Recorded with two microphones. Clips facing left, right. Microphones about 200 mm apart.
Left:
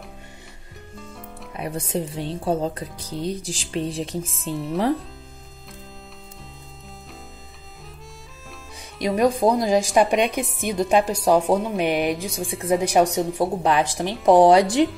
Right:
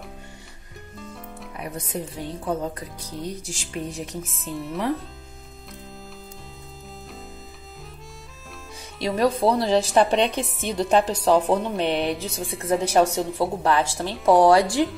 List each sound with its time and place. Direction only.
1.6 s speech: 30° left (ahead or behind)
4.3 s speech: centre (ahead or behind)
8.9 s a woman's voice: 15° left (ahead or behind)
12.4 s speech: centre (ahead or behind)
12.8 s a woman's voice: 15° left (ahead or behind)